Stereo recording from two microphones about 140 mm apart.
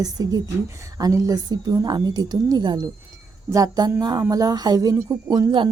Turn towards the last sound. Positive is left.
turn(degrees=-30)  # may be behind; listen again after turning